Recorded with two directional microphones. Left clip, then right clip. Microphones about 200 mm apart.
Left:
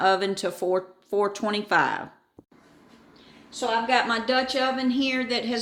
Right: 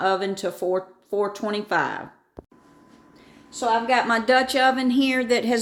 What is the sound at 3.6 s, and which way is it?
A woman's voice, 30° right (ahead or behind).